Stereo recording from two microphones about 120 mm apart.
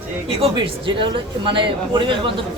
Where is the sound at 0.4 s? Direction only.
45° right (ahead or behind).